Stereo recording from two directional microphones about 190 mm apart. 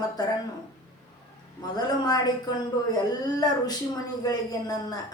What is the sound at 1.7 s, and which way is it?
A woman's voice, 20° left (ahead or behind).